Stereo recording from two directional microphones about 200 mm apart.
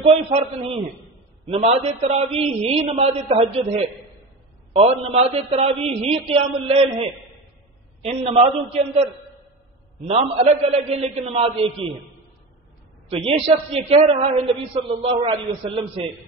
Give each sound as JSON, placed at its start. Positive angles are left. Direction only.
{"t": 0.0, "sound": "a man's voice", "side_deg": -30}
{"t": 8.1, "sound": "a man's voice", "side_deg": -30}
{"t": 10.0, "sound": "a man's voice", "side_deg": -30}
{"t": 13.1, "sound": "a man's voice", "side_deg": -30}